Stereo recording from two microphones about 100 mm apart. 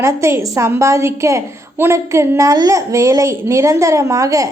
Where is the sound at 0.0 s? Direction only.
30° right (ahead or behind).